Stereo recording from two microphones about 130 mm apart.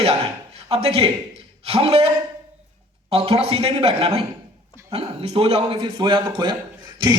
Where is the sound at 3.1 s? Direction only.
45° right (ahead or behind).